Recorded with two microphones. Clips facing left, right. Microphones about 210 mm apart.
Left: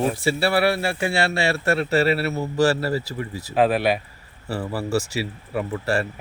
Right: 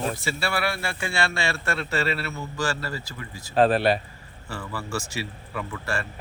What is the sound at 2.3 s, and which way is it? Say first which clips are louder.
Speech: left 9 dB; 35° left (ahead or behind).